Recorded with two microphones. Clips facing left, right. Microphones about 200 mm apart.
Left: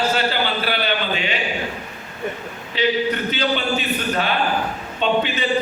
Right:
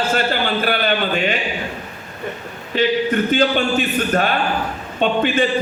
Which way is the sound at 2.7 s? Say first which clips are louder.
Right 3 dB; 50° right (ahead or behind).